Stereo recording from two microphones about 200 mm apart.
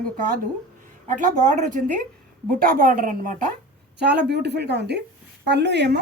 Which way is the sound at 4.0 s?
55° right (ahead or behind).